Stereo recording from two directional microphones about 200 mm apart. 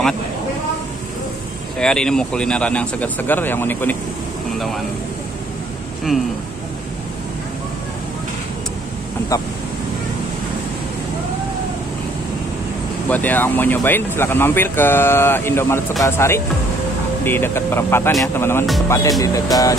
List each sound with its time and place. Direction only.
1.8 s speech: 5° left (ahead or behind)
13.1 s speech: 10° left (ahead or behind)